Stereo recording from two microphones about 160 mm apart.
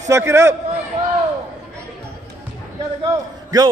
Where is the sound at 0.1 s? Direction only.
15° right (ahead or behind).